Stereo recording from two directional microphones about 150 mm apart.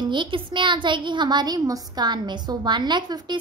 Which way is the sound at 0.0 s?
30° right (ahead or behind).